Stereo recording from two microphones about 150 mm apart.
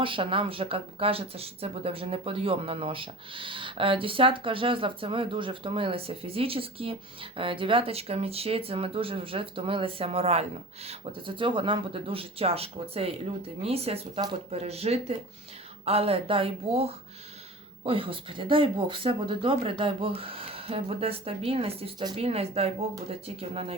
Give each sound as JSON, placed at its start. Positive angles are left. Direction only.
{"t": 0.0, "sound": "speech", "side_deg": -35}